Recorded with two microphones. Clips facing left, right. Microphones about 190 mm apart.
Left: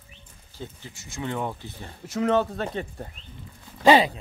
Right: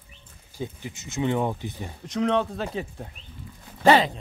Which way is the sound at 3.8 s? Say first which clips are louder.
Left 1 dB; 15° left (ahead or behind).